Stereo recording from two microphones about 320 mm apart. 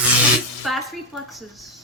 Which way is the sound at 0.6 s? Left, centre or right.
Centre.